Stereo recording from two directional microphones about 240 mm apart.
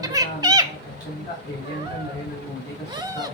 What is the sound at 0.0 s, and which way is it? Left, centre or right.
Cat, centre.